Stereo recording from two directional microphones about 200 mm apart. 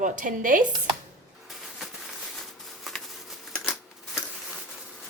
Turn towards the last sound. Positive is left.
turn(degrees=0)  # may be behind; listen again after turning